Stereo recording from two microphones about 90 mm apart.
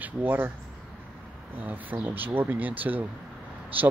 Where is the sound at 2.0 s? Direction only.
20° right (ahead or behind).